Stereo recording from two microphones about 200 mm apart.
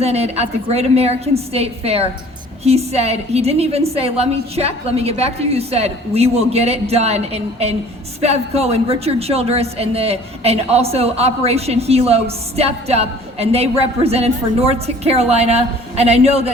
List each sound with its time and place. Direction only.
0.0 s speech: 30° right (ahead or behind)